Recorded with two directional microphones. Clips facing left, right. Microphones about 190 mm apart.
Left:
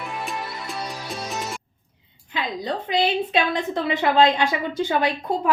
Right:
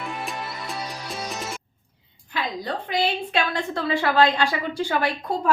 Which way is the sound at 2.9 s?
20° left (ahead or behind).